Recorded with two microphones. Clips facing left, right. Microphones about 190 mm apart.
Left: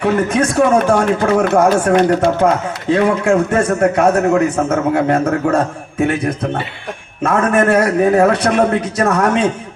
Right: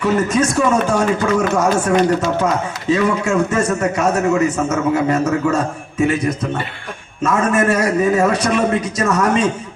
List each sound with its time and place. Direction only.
0.0 s speech: 60° left (ahead or behind)